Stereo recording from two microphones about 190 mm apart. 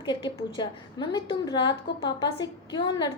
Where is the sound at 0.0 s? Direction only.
25° left (ahead or behind).